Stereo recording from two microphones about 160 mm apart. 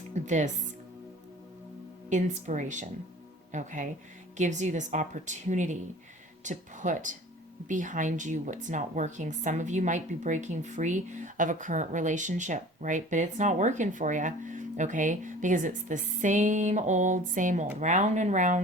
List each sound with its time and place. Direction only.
0.1 s speech: 50° right (ahead or behind)
2.0 s a woman's voice: 50° right (ahead or behind)